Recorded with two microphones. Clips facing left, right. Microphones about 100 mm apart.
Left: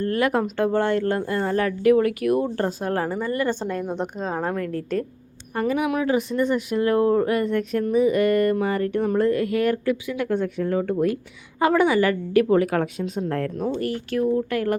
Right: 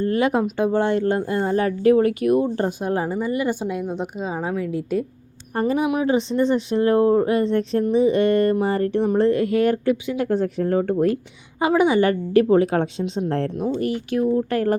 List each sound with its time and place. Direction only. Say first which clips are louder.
0.0 s speech: right 2 dB; 20° right (ahead or behind)
5.5 s speech: right 2 dB; 30° right (ahead or behind)
10.2 s speech: right 2 dB; 35° right (ahead or behind)
11.6 s speech: right 1 dB; 15° right (ahead or behind)
11.9 s speech: right 2 dB; 30° right (ahead or behind)
14.5 s speech: right 3 dB; 35° right (ahead or behind)